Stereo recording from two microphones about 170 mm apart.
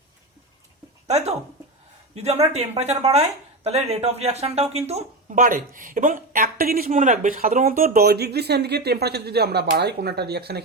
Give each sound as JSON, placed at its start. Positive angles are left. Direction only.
{"t": 1.0, "sound": "speech", "side_deg": -40}